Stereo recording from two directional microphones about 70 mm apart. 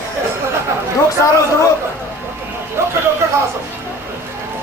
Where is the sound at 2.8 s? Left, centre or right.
Right.